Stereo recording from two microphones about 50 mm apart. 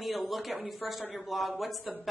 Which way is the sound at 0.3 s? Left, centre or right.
Centre.